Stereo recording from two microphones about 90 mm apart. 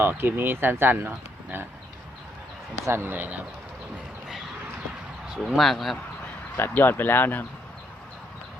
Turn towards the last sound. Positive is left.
turn(degrees=20)  # may be behind; listen again after turning